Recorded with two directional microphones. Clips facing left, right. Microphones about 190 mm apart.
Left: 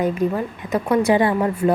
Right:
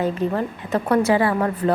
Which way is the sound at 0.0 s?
10° left (ahead or behind).